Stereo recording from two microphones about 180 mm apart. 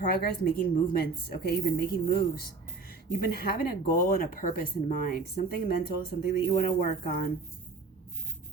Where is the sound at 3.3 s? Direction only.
55° left (ahead or behind).